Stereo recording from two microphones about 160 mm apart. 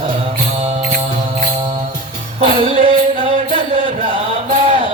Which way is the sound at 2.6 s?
35° right (ahead or behind).